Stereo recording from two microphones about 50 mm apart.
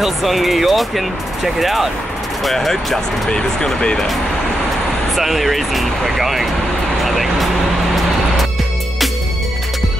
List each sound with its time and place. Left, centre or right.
0.0 s speech: centre
5.1 s speech: centre
7.1 s vehicle: centre